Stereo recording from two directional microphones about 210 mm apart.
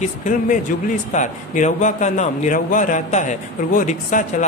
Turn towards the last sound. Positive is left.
turn(degrees=35)  # may be behind; listen again after turning